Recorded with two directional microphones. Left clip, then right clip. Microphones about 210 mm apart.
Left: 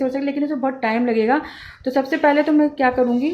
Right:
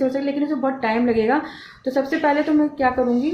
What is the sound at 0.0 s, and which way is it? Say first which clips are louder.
Speech: even; 30° left (ahead or behind).